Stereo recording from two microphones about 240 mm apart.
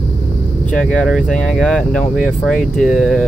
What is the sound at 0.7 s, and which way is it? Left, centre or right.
Speech, centre.